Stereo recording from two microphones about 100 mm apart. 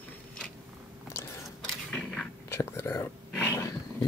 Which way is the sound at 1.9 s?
5° left (ahead or behind).